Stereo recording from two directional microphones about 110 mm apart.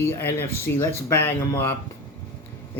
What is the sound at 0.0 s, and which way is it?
Speech, 20° left (ahead or behind).